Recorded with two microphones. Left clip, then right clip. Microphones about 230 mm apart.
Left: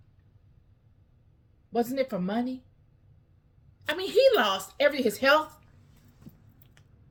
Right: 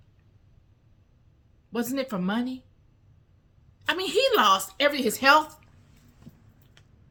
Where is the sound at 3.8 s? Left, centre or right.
Centre.